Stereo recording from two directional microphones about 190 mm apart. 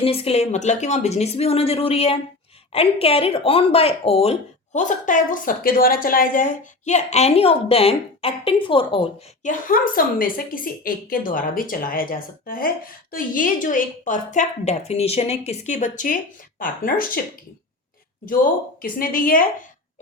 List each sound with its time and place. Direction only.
0.0 s speech: 30° left (ahead or behind)
9.4 s a woman's voice: 45° left (ahead or behind)
18.8 s a woman's voice: 50° left (ahead or behind)